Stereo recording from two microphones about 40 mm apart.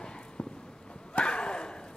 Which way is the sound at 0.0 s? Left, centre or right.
Left.